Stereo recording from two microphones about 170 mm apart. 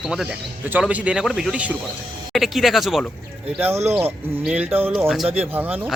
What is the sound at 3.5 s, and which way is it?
Speech, 10° right (ahead or behind).